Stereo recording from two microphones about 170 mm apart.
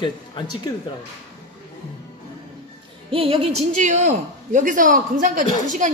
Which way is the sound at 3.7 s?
45° right (ahead or behind).